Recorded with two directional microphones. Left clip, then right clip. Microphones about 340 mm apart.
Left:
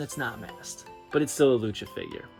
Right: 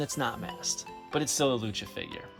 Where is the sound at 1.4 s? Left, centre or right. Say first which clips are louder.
Left 7 dB; right.